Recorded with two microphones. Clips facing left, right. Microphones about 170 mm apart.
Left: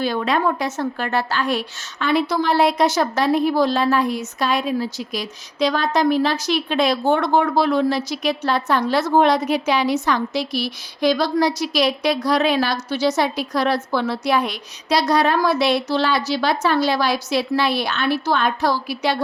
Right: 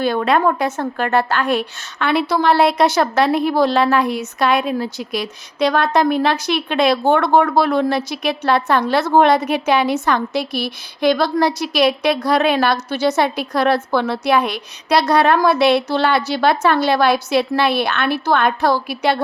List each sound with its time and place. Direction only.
0.0 s a woman's voice: 55° right (ahead or behind)